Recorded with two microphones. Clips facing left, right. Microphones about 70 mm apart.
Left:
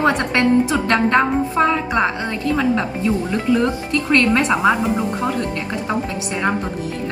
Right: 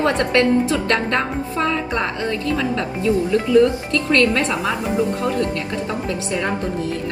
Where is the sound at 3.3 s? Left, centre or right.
Left.